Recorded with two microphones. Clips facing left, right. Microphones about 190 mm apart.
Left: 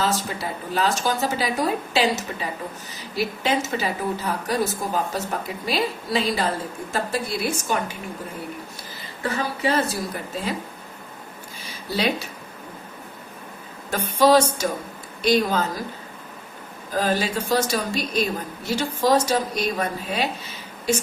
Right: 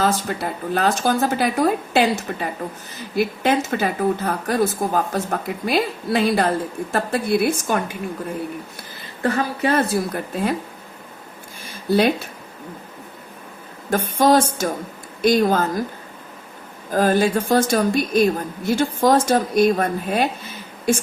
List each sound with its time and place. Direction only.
0.0 s speech: 55° right (ahead or behind)
9.2 s speech: 55° right (ahead or behind)
11.6 s speech: 50° right (ahead or behind)
13.9 s speech: 50° right (ahead or behind)
16.9 s speech: 50° right (ahead or behind)